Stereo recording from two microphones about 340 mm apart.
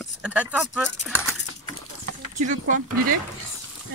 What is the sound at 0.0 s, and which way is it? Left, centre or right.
Speech, centre.